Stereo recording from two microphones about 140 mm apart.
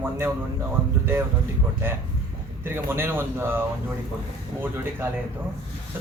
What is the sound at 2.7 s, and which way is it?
Speech, 15° right (ahead or behind).